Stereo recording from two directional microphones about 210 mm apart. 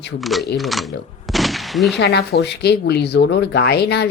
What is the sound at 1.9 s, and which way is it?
Speech, 50° left (ahead or behind).